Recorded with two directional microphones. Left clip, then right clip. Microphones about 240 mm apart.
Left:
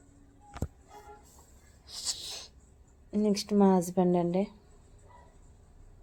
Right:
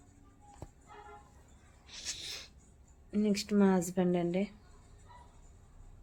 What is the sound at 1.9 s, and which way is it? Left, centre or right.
Snort, centre.